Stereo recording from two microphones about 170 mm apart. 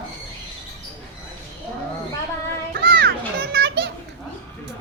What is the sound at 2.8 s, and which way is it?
Children playing, 75° right (ahead or behind).